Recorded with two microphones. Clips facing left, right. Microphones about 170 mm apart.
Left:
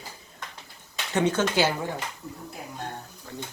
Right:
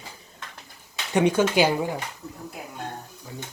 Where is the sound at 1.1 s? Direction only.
15° right (ahead or behind).